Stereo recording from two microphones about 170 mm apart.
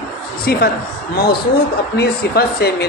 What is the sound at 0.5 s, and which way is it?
A woman's voice, 65° left (ahead or behind).